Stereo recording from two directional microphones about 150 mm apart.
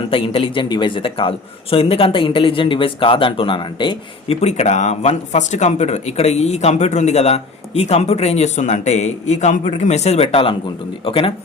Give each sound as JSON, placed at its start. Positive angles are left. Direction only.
{"t": 0.1, "sound": "speech", "side_deg": 40}
{"t": 4.4, "sound": "speech", "side_deg": 50}